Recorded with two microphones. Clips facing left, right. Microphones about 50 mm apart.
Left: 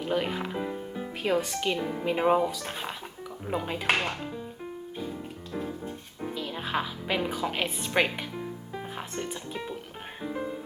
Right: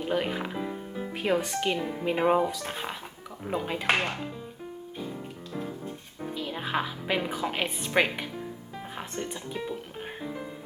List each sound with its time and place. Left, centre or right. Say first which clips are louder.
0.0 s music: even; centre
1.1 s music: right 1 dB; centre
1.4 s speech: even; centre
4.9 s music: even; centre
6.3 s a woman's voice: right 1 dB; centre
8.7 s music: even; centre